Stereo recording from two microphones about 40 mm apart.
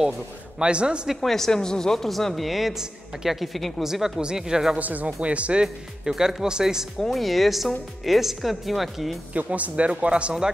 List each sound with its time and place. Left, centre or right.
0.6 s speech: right
1.2 s speech: centre
3.8 s speech: centre
4.7 s speech: right
5.6 s speech: centre
7.0 s speech: centre
9.3 s speech: right